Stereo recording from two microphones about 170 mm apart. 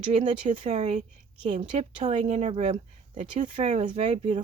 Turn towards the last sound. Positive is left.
turn(degrees=-40)  # may be behind; listen again after turning